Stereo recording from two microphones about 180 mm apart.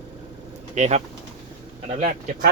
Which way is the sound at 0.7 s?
40° right (ahead or behind).